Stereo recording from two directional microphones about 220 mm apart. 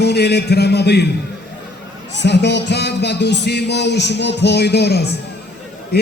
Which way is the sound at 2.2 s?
50° left (ahead or behind).